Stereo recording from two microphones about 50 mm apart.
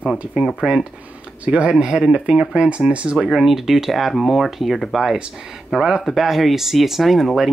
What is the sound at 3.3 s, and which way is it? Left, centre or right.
Speech, centre.